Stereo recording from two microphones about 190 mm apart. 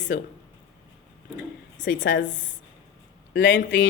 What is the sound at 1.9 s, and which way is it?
Speech, 45° left (ahead or behind).